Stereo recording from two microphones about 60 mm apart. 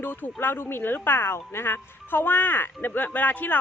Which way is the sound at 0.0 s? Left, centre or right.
Left.